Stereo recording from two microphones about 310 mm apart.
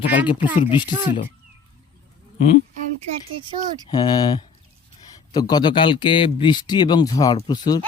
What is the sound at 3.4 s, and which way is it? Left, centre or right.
Speech, centre.